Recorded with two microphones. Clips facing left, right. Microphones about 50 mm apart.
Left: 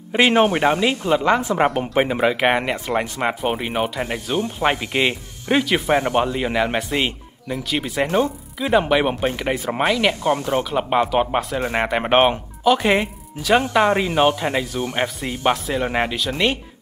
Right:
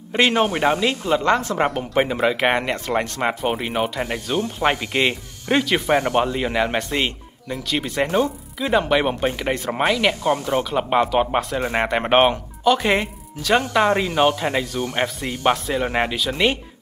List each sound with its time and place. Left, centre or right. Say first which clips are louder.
0.3 s speech: left 2 dB; centre